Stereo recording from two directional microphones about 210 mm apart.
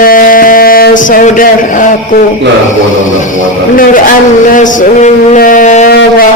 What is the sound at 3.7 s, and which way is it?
A man's voice, 40° left (ahead or behind).